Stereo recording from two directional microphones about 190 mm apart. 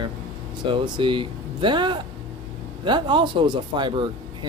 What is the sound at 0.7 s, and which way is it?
Speech, 25° right (ahead or behind).